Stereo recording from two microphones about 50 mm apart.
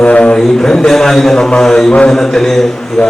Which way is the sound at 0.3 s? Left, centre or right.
Centre.